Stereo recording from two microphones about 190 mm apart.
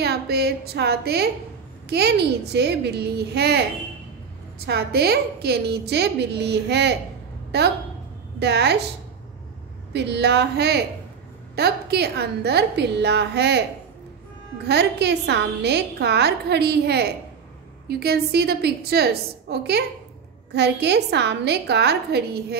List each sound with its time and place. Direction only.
0.0 s a woman's voice: 55° right (ahead or behind)
4.6 s a woman's voice: 55° right (ahead or behind)
9.9 s a woman's voice: 60° right (ahead or behind)
14.7 s a woman's voice: 60° right (ahead or behind)